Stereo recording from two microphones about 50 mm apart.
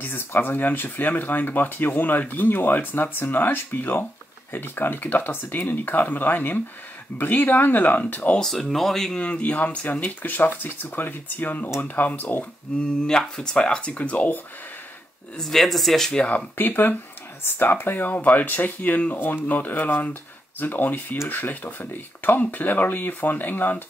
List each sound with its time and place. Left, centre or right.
0.0 s speech: left
8.4 s speech: centre
9.1 s speech: left
12.7 s speech: centre
15.3 s speech: centre
16.3 s speech: left